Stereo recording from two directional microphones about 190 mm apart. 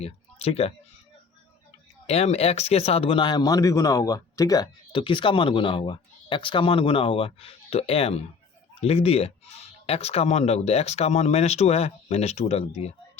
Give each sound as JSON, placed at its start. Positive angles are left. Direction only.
{"t": 0.0, "sound": "speech", "side_deg": 30}
{"t": 2.0, "sound": "speech", "side_deg": 35}